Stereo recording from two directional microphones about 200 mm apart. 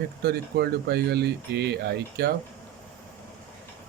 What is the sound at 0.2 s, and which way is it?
Speech, 55° right (ahead or behind).